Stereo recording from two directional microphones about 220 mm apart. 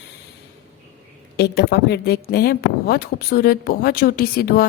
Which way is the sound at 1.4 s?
45° left (ahead or behind).